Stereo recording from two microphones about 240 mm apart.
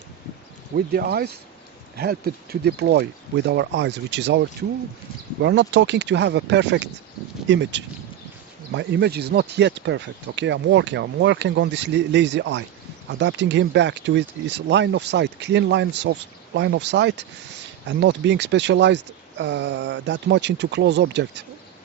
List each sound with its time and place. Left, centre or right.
0.9 s speech: right